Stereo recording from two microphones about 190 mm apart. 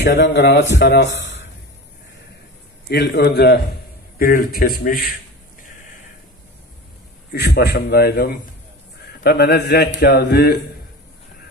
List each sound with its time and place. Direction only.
0.0 s speech: 70° left (ahead or behind)
2.9 s a man's voice: 60° left (ahead or behind)
7.3 s a man's voice: 60° left (ahead or behind)